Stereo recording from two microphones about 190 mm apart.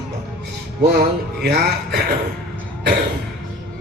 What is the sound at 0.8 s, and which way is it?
Speech, 60° right (ahead or behind).